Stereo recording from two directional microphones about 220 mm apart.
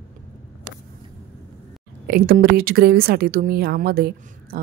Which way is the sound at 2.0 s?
40° right (ahead or behind).